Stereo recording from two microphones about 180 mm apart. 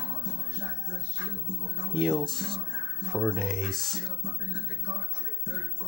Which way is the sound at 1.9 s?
5° left (ahead or behind).